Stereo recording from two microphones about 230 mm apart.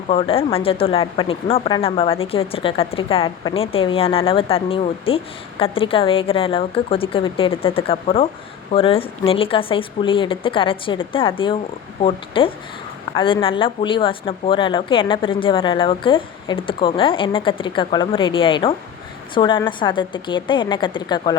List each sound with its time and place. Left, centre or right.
0.1 s speech: left